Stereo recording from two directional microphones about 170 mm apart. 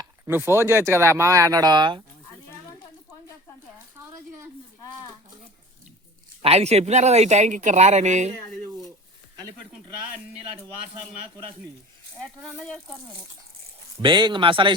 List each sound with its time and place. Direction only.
0.0 s speech: 15° right (ahead or behind)
6.4 s speech: 40° right (ahead or behind)
12.2 s speech: 5° left (ahead or behind)
14.0 s speech: 25° right (ahead or behind)